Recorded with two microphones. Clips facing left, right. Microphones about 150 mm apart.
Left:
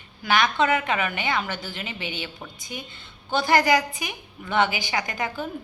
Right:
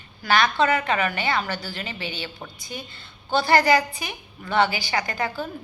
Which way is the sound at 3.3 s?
20° left (ahead or behind).